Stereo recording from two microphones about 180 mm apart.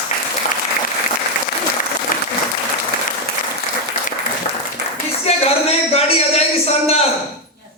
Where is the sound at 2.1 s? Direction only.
50° left (ahead or behind).